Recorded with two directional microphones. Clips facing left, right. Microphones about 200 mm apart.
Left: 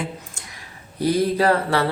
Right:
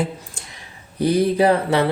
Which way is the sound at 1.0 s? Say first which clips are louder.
Right 3 dB; 20° right (ahead or behind).